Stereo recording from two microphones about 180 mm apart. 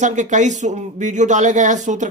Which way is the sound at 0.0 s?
40° right (ahead or behind).